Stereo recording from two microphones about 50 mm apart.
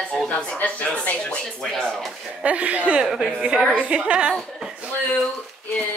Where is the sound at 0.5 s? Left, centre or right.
Left.